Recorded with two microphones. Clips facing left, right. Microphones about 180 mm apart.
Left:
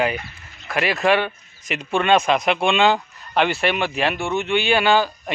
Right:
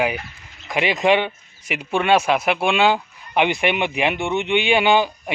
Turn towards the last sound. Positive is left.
turn(degrees=-15)  # may be behind; listen again after turning